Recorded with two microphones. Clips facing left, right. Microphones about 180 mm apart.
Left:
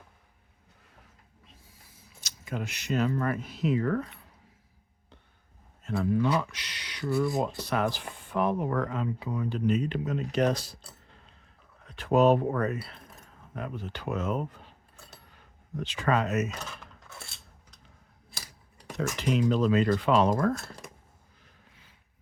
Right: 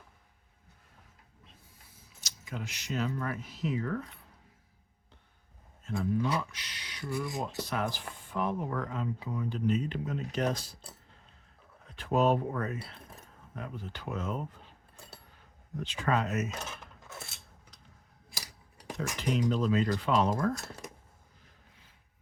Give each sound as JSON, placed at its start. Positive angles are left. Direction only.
{"t": 2.2, "sound": "speech", "side_deg": 55}
{"t": 5.8, "sound": "speech", "side_deg": 70}
{"t": 11.9, "sound": "speech", "side_deg": 75}
{"t": 15.8, "sound": "speech", "side_deg": 85}
{"t": 18.9, "sound": "speech", "side_deg": 80}